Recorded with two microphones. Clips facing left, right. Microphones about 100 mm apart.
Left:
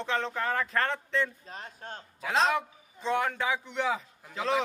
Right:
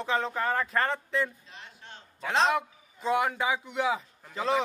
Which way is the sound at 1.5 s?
45° left (ahead or behind).